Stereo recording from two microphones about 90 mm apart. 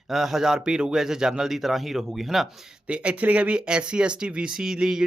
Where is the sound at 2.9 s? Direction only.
15° right (ahead or behind).